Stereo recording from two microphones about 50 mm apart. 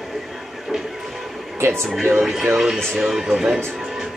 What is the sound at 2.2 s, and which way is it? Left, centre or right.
Speech, centre.